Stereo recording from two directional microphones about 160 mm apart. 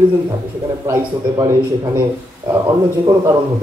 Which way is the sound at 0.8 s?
15° right (ahead or behind).